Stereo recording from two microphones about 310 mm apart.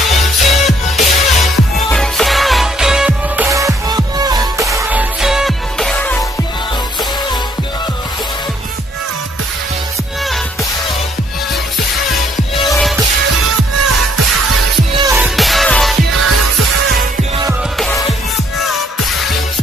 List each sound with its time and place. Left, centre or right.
0.2 s music: centre
12.7 s music: centre
15.0 s music: centre
16.3 s music: right
17.7 s music: centre